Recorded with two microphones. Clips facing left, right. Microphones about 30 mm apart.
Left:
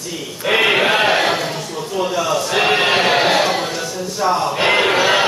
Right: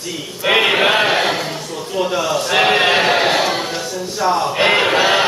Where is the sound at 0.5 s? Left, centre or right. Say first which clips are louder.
Even; centre.